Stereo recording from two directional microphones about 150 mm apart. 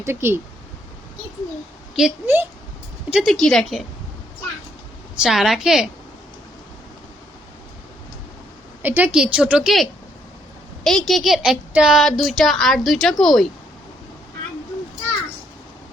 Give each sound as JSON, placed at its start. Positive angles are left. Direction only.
{"t": 0.0, "sound": "a woman's voice", "side_deg": -15}
{"t": 2.0, "sound": "speech", "side_deg": -5}
{"t": 5.1, "sound": "speech", "side_deg": -5}
{"t": 8.8, "sound": "a woman's voice", "side_deg": -10}